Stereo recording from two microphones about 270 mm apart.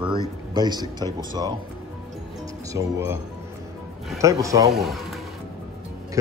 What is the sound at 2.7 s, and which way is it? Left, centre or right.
Speech, centre.